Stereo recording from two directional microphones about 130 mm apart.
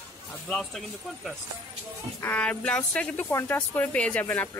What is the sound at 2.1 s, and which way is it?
Speech, 15° left (ahead or behind).